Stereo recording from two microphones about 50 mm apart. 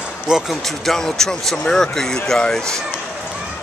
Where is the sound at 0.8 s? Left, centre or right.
Centre.